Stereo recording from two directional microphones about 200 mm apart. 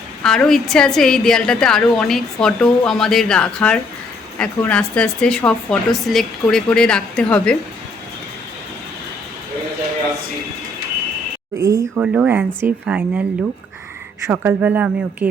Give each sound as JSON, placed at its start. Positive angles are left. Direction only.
{"t": 0.2, "sound": "a woman's voice", "side_deg": 5}
{"t": 11.5, "sound": "a woman's voice", "side_deg": -15}
{"t": 12.0, "sound": "a woman's voice", "side_deg": -5}